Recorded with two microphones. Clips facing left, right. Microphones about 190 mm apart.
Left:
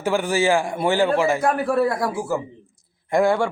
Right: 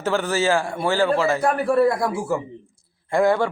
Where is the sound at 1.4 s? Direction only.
Centre (ahead or behind).